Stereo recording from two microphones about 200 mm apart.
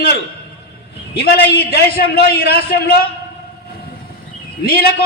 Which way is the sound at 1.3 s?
50° left (ahead or behind).